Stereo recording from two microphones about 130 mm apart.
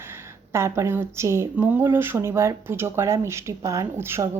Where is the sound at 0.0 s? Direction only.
20° right (ahead or behind).